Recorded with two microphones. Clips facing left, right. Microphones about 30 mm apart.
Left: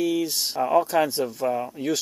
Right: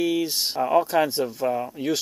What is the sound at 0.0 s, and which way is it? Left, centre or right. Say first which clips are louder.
Speech: right 1 dB; right.